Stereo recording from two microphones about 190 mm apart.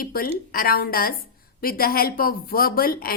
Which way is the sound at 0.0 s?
50° left (ahead or behind).